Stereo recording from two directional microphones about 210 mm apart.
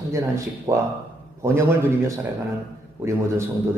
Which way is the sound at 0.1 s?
15° right (ahead or behind).